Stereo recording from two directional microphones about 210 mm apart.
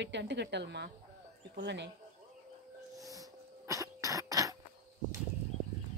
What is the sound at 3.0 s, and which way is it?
Cough, 15° right (ahead or behind).